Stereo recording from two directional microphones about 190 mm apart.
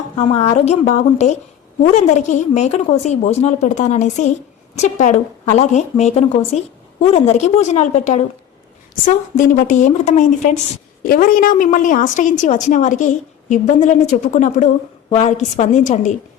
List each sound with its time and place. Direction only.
0.2 s a woman's voice: 35° left (ahead or behind)